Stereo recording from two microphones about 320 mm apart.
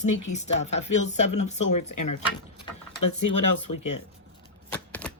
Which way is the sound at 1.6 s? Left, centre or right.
Left.